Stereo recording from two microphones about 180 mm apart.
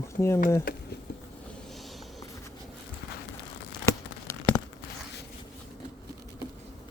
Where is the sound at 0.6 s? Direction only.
60° left (ahead or behind).